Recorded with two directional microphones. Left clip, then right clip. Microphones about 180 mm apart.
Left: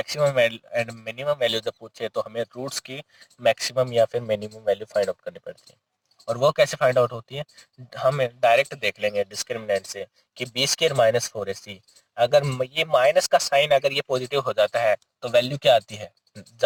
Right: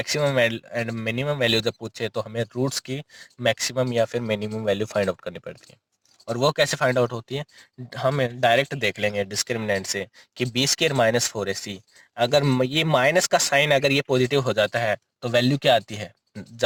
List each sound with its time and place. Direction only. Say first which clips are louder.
0.0 s speech: left 1 dB; 40° right (ahead or behind)
6.6 s speech: left 2 dB; 45° right (ahead or behind)